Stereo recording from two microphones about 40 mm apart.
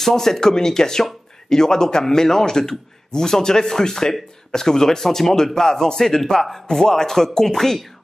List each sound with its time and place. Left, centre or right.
0.0 s speech: centre